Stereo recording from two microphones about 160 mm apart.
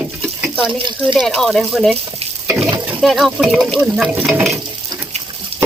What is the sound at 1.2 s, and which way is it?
Speech, 5° left (ahead or behind).